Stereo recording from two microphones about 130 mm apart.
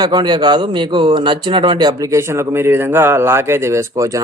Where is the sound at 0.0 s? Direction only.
30° right (ahead or behind).